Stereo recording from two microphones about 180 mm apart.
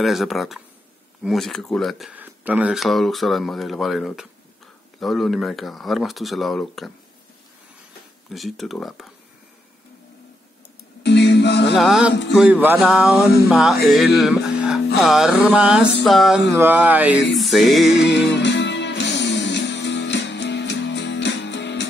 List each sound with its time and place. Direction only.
0.0 s speech: centre (ahead or behind)
8.3 s speech: centre (ahead or behind)
11.0 s music: 70° left (ahead or behind)
11.7 s speech: centre (ahead or behind)
12.1 s a sound: 75° left (ahead or behind)
12.4 s speech: 10° right (ahead or behind)
14.3 s music: 5° right (ahead or behind)
15.0 s speech: centre (ahead or behind)
16.5 s a sound: 10° right (ahead or behind)
17.4 s speech: centre (ahead or behind)
17.9 s music: 75° left (ahead or behind)